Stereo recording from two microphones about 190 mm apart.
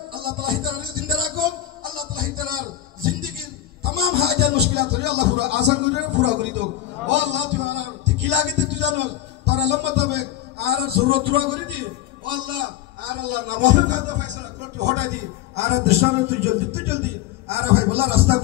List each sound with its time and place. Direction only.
0.1 s music: 50° right (ahead or behind)
14.6 s a sound: 65° right (ahead or behind)
15.0 s a man's voice: 35° right (ahead or behind)